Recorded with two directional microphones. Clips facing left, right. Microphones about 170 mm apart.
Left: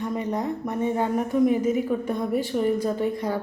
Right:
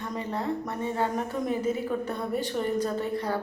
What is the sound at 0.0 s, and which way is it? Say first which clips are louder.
A woman's voice: left 5 dB; 15° left (ahead or behind).